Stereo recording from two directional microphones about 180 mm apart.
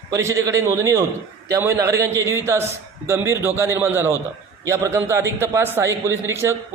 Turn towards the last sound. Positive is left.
turn(degrees=-15)  # may be behind; listen again after turning